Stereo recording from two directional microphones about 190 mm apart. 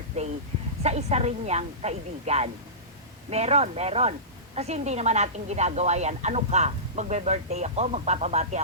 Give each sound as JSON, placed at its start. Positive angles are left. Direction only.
{"t": 0.1, "sound": "a woman's voice", "side_deg": -35}